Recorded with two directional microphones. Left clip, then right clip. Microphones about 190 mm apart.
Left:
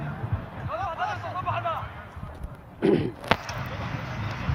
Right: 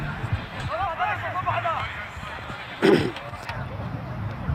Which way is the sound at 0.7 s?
40° right (ahead or behind).